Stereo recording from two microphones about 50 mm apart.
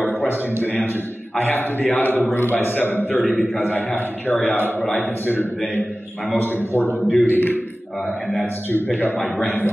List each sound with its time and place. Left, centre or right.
1.4 s a man's voice: left
8.6 s a man's voice: left